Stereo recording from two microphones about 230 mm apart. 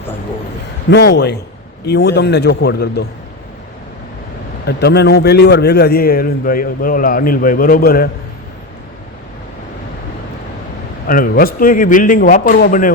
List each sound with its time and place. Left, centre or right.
0.9 s a man's voice: left
4.6 s a man's voice: left
11.0 s a man's voice: left